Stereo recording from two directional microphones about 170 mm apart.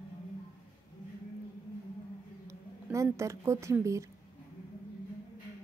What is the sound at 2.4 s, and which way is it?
A woman's voice, 15° right (ahead or behind).